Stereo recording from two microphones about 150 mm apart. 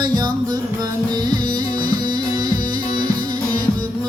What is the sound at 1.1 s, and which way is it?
Music, 25° right (ahead or behind).